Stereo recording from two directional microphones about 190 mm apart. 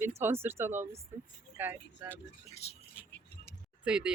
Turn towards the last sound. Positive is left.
turn(degrees=-5)  # may be behind; listen again after turning